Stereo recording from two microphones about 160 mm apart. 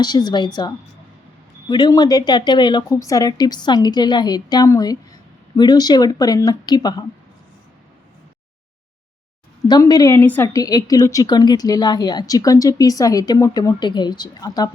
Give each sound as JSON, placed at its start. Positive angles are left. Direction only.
{"t": 0.0, "sound": "a woman's voice", "side_deg": 25}
{"t": 1.7, "sound": "a woman's voice", "side_deg": 25}
{"t": 9.6, "sound": "a woman's voice", "side_deg": 25}